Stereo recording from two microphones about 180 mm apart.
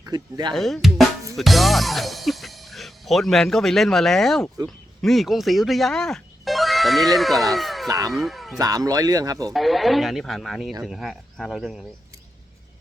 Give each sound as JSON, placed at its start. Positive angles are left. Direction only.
{"t": 0.0, "sound": "speech", "side_deg": -25}
{"t": 0.5, "sound": "speech", "side_deg": 0}
{"t": 7.9, "sound": "speech", "side_deg": -20}
{"t": 8.1, "sound": "speech", "side_deg": 0}
{"t": 8.5, "sound": "speech", "side_deg": -20}
{"t": 9.5, "sound": "speech", "side_deg": 0}